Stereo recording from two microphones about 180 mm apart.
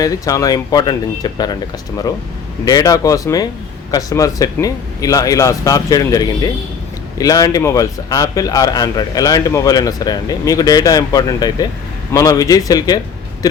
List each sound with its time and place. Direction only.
0.0 s speech: 20° left (ahead or behind)
2.6 s speech: 20° left (ahead or behind)